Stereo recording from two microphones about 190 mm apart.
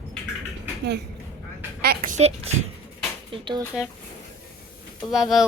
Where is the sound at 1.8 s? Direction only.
45° right (ahead or behind).